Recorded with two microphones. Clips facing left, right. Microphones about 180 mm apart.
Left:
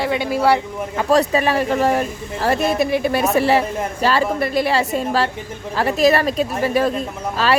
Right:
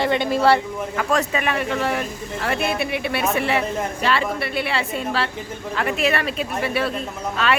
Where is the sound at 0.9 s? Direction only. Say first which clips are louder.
Left 6 dB; 35° left (ahead or behind).